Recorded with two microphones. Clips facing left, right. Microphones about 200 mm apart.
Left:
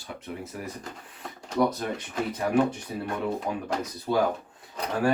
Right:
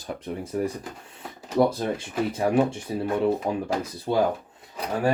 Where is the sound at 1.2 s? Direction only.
5° right (ahead or behind).